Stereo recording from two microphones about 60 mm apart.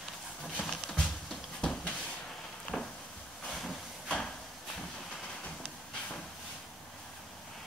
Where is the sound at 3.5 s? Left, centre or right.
Centre.